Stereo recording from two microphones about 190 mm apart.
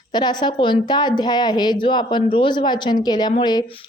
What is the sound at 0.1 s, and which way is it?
A woman's voice, 20° left (ahead or behind).